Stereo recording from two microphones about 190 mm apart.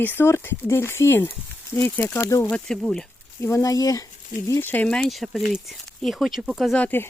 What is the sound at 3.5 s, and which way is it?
Speech, 15° left (ahead or behind).